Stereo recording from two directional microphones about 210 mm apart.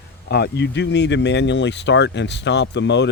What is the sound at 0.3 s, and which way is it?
Speech, 50° left (ahead or behind).